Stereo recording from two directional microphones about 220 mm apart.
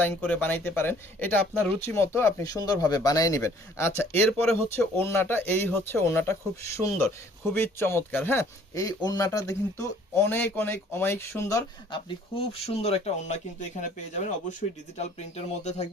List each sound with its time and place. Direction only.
0.0 s speech: 5° left (ahead or behind)
7.4 s speech: 10° left (ahead or behind); by 15.9 s 30° left (ahead or behind)